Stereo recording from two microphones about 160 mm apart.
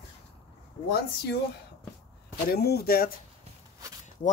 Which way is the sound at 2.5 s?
80° left.